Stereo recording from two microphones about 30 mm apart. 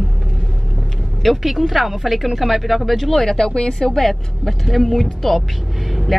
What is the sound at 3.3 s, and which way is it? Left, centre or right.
Speech, left.